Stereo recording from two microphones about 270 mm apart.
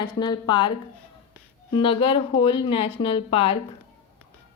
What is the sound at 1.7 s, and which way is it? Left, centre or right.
A woman's voice, centre.